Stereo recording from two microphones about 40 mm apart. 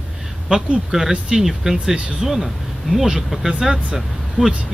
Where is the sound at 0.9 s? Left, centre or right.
Centre.